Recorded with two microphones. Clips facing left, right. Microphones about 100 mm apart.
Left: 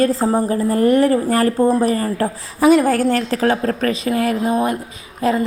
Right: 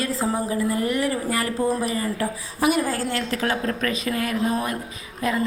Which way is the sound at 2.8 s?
65° left (ahead or behind).